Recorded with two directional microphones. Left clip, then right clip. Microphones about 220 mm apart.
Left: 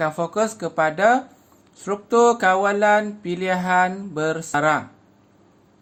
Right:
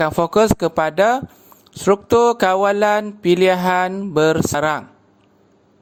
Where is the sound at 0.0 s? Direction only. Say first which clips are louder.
Right 6 dB; 40° right (ahead or behind).